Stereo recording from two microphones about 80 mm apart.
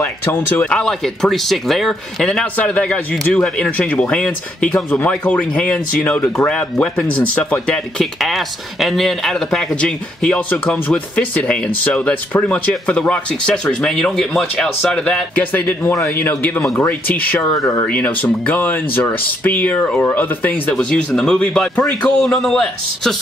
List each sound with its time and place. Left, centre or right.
0.0 s speech: left
0.7 s speech: centre
8.0 s speech: centre
15.5 s speech: left
21.1 s speech: centre
22.2 s speech: centre